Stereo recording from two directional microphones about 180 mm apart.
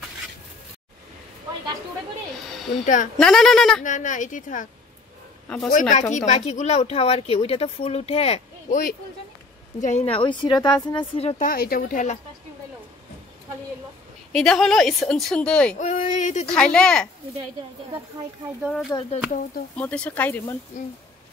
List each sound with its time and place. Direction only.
2.4 s speech: centre (ahead or behind)
2.8 s speech: 45° left (ahead or behind)
3.2 s a woman's voice: 5° left (ahead or behind)
3.8 s speech: 45° left (ahead or behind)
5.7 s speech: 45° left (ahead or behind)
11.3 s speech: 55° left (ahead or behind)
14.3 s a woman's voice: centre (ahead or behind)
15.8 s speech: 40° left (ahead or behind)
16.4 s a woman's voice: 5° left (ahead or behind)
18.6 s a woman's voice: centre (ahead or behind)
20.7 s speech: 40° left (ahead or behind)